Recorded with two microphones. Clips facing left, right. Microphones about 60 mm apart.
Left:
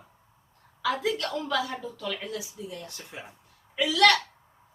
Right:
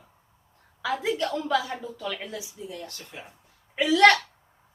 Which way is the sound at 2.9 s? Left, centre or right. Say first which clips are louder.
Even; left.